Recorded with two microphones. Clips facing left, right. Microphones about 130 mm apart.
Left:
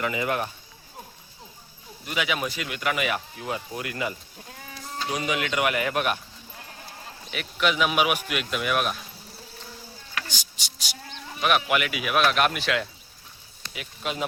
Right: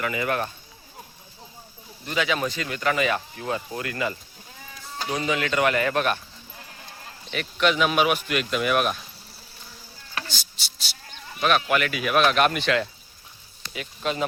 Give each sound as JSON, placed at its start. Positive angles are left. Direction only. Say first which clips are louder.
{"t": 0.0, "sound": "speech", "louder": "right 1 dB", "side_deg": 20}
{"t": 2.0, "sound": "speech", "louder": "right 3 dB", "side_deg": 10}
{"t": 7.3, "sound": "speech", "louder": "right 3 dB", "side_deg": 5}
{"t": 10.2, "sound": "a sound", "louder": "right 1 dB", "side_deg": 15}
{"t": 11.3, "sound": "speech", "louder": "right 1 dB", "side_deg": 15}